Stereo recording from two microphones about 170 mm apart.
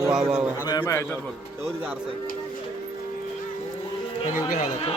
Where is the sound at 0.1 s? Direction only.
5° right (ahead or behind).